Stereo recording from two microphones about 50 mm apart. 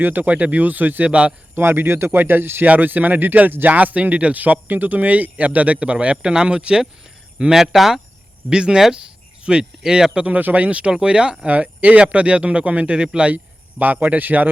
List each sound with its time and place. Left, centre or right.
0.0 s speech: right
1.5 s speech: right
2.6 s speech: right
7.5 s speech: centre
8.4 s speech: centre
10.3 s speech: right
13.3 s speech: right